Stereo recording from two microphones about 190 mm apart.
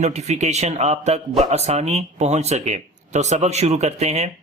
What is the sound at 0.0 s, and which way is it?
Mantra, 35° right (ahead or behind).